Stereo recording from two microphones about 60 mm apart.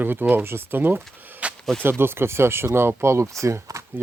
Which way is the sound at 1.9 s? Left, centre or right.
Right.